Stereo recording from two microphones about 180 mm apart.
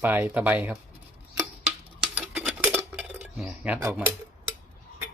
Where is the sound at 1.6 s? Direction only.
5° right (ahead or behind).